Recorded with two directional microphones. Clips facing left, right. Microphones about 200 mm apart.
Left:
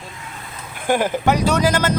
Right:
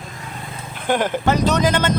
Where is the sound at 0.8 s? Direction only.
10° left (ahead or behind).